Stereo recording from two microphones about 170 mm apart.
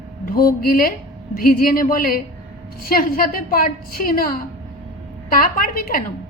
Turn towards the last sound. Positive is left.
turn(degrees=55)  # may be behind; listen again after turning